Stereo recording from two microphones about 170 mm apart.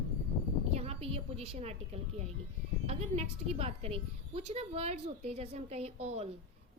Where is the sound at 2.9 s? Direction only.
40° right (ahead or behind).